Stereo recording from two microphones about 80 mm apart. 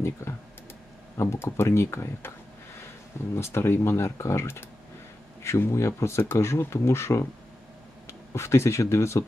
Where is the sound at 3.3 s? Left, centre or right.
Left.